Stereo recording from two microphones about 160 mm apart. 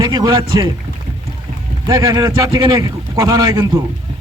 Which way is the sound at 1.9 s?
20° right (ahead or behind).